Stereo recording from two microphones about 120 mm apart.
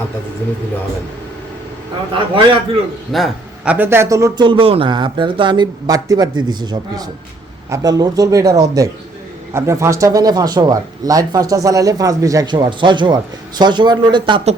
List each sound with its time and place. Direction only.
2.1 s a man's voice: 45° right (ahead or behind)
3.1 s a man's voice: centre (ahead or behind)
3.7 s speech: 20° right (ahead or behind)
4.4 s speech: 45° right (ahead or behind)